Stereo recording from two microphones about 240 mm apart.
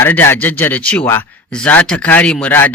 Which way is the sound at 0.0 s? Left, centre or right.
Centre.